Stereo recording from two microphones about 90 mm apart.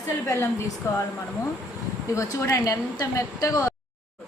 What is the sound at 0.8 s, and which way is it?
Speech, 30° left (ahead or behind).